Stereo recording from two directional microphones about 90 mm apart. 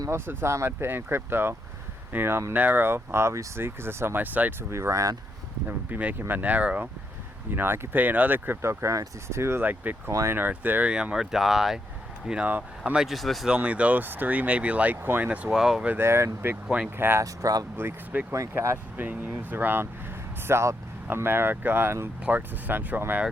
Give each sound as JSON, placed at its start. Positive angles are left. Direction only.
{"t": 0.1, "sound": "speech", "side_deg": -25}
{"t": 4.7, "sound": "speech", "side_deg": -35}
{"t": 5.6, "sound": "speech", "side_deg": -20}
{"t": 10.1, "sound": "speech", "side_deg": -35}
{"t": 10.3, "sound": "speech", "side_deg": -20}
{"t": 13.5, "sound": "speech", "side_deg": -15}
{"t": 15.5, "sound": "speech", "side_deg": -5}
{"t": 15.9, "sound": "speech", "side_deg": -25}
{"t": 16.6, "sound": "speech", "side_deg": -5}
{"t": 17.0, "sound": "speech", "side_deg": -25}
{"t": 17.2, "sound": "speech", "side_deg": -40}
{"t": 17.7, "sound": "speech", "side_deg": -20}
{"t": 18.3, "sound": "speech", "side_deg": -30}
{"t": 18.9, "sound": "speech", "side_deg": -20}